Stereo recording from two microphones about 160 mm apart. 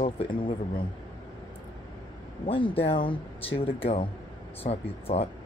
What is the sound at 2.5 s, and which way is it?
Speech, 35° left (ahead or behind).